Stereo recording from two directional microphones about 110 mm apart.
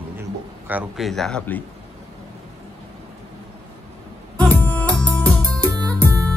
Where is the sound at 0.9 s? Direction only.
Centre (ahead or behind).